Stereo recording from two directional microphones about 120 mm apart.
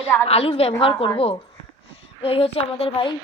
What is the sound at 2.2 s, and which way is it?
Speech, 55° left (ahead or behind).